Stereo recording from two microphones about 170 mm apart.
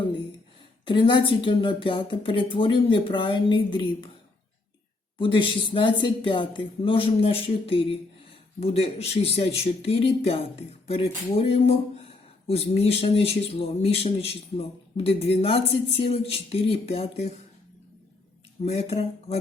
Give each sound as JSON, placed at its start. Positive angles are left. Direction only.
{"t": 0.9, "sound": "speech", "side_deg": 30}
{"t": 5.2, "sound": "speech", "side_deg": 30}
{"t": 18.6, "sound": "speech", "side_deg": 35}